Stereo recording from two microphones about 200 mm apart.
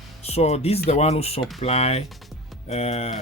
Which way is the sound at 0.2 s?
30° left (ahead or behind).